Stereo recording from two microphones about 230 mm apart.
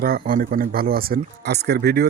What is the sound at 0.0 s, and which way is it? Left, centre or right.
Speech, right.